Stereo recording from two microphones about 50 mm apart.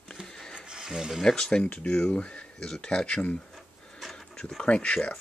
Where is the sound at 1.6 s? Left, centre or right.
Left.